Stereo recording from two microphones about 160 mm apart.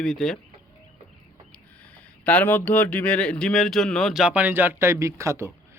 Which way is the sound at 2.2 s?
10° left (ahead or behind).